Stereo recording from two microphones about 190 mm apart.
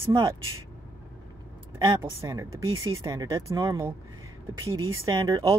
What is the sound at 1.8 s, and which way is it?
Speech, 15° right (ahead or behind).